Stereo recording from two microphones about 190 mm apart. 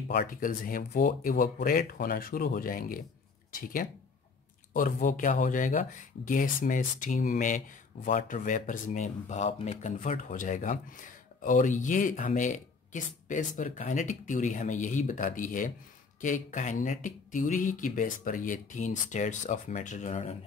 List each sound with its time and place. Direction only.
0.1 s speech: 50° left (ahead or behind)